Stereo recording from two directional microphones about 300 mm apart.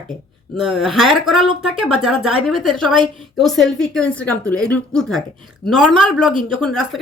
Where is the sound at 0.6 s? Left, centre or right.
Centre.